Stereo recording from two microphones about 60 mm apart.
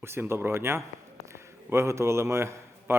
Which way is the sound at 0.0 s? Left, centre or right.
Right.